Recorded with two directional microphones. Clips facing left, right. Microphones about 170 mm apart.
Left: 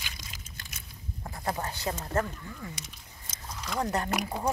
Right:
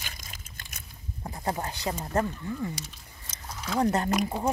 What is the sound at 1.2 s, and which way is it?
Speech, 20° right (ahead or behind).